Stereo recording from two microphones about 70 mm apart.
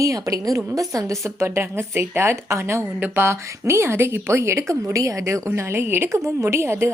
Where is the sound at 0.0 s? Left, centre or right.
Right.